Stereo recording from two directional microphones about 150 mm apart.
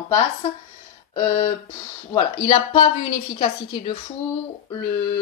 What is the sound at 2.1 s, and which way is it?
Speech, 35° left (ahead or behind).